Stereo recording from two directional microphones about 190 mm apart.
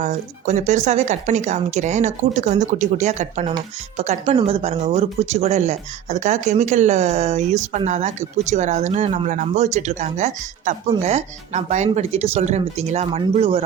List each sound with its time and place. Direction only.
0.0 s speech: 40° right (ahead or behind)